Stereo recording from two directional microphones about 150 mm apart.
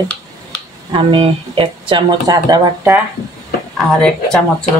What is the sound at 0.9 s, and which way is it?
Speech, 35° right (ahead or behind).